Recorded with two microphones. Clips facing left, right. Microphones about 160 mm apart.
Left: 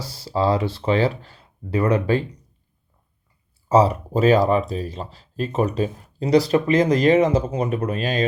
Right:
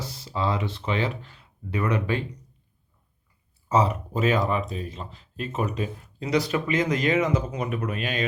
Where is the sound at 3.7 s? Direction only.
35° left (ahead or behind).